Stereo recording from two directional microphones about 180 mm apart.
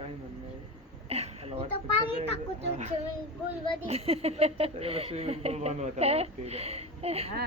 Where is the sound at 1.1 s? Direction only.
35° right (ahead or behind).